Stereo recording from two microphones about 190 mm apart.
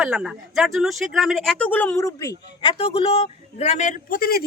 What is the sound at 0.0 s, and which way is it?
Speech, 5° right (ahead or behind).